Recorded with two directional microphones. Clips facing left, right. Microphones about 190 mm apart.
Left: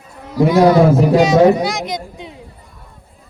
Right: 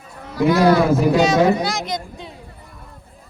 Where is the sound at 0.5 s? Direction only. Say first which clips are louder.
Left 4 dB; 20° left (ahead or behind).